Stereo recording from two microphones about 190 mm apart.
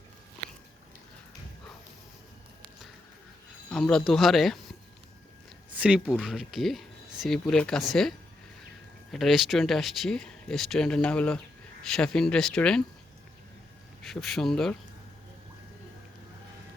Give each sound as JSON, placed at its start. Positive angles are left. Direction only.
{"t": 3.7, "sound": "speech", "side_deg": 5}
{"t": 5.7, "sound": "speech", "side_deg": -5}
{"t": 9.1, "sound": "speech", "side_deg": 0}
{"t": 14.1, "sound": "speech", "side_deg": 0}